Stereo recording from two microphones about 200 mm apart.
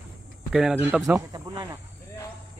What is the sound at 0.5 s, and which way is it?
Speech, 5° right (ahead or behind).